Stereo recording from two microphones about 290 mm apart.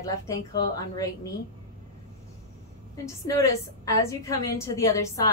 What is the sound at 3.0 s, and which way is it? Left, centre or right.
Speech, centre.